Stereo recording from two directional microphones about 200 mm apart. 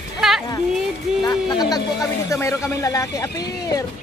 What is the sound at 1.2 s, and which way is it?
Speech, 20° left (ahead or behind).